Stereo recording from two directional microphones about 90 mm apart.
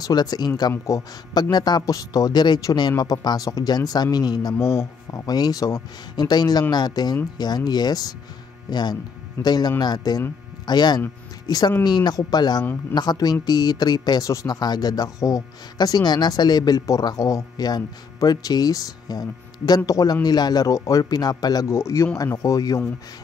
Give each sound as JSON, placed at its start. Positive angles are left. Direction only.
{"t": 0.0, "sound": "speech", "side_deg": 50}
{"t": 2.6, "sound": "speech", "side_deg": 50}
{"t": 4.6, "sound": "speech", "side_deg": 30}
{"t": 5.2, "sound": "speech", "side_deg": 45}
{"t": 21.6, "sound": "speech", "side_deg": 30}